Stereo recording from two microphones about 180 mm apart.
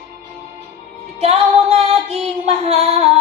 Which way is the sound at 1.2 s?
35° right (ahead or behind).